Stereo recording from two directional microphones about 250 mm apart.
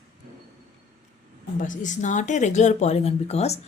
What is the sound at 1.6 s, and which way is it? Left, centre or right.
A woman's voice, left.